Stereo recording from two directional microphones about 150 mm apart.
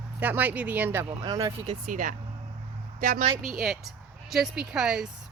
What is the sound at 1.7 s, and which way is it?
Speech, 60° right (ahead or behind).